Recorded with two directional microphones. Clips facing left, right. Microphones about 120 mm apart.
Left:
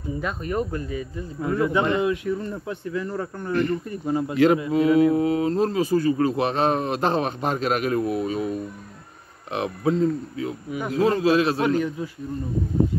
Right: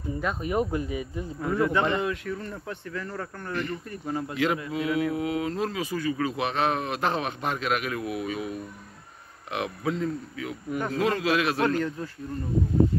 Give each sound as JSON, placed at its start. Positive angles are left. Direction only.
{"t": 0.2, "sound": "speech", "side_deg": -5}
{"t": 1.4, "sound": "speech", "side_deg": 0}
{"t": 3.5, "sound": "speech", "side_deg": 40}
{"t": 3.9, "sound": "speech", "side_deg": 15}
{"t": 4.7, "sound": "speech", "side_deg": 35}
{"t": 10.7, "sound": "speech", "side_deg": 5}
{"t": 11.0, "sound": "a man's voice", "side_deg": 30}
{"t": 11.6, "sound": "speech", "side_deg": 10}